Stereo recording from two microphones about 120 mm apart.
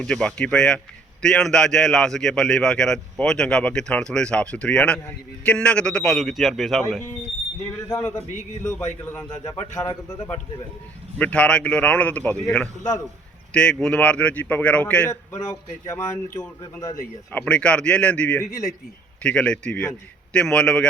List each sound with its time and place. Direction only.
0.0 s a man's voice: 5° left (ahead or behind)
7.9 s a man's voice: 15° left (ahead or behind)
11.2 s a man's voice: 10° left (ahead or behind)
15.1 s speech: 25° left (ahead or behind)
17.3 s a man's voice: 10° left (ahead or behind)